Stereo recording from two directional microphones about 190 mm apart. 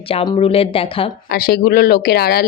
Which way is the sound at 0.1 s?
30° left (ahead or behind).